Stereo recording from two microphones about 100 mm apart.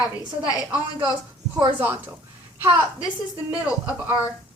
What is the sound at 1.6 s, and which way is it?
Speech, 20° right (ahead or behind).